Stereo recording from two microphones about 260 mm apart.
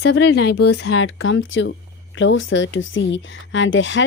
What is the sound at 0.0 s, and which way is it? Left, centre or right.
Speech, left.